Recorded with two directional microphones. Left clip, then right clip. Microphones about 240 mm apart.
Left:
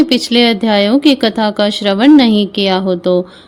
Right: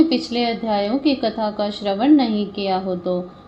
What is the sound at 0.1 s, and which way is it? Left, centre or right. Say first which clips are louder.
A woman's voice: left 10 dB; left.